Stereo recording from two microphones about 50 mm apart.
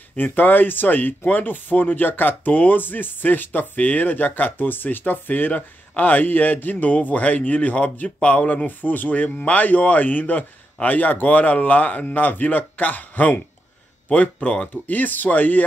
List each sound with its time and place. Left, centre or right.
0.2 s speech: left